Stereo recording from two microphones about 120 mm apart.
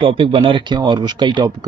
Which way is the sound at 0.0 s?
45° right (ahead or behind).